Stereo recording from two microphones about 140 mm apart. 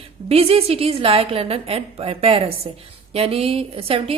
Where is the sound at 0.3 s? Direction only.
45° right (ahead or behind).